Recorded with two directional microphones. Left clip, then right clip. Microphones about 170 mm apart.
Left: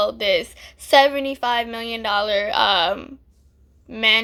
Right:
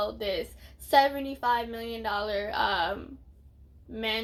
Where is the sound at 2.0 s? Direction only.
10° left (ahead or behind).